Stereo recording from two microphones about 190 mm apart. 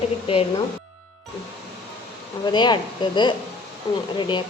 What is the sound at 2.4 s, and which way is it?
A woman's voice, 25° left (ahead or behind).